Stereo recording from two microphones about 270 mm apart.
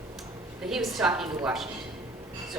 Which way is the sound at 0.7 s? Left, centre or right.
Centre.